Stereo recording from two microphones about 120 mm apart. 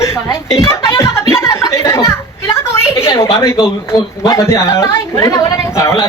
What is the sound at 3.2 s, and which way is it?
A man's voice, 25° left (ahead or behind).